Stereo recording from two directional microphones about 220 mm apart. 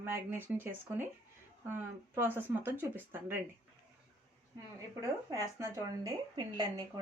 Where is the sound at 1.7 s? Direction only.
10° right (ahead or behind).